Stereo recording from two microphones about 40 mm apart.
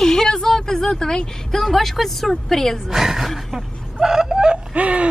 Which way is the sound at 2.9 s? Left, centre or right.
Centre.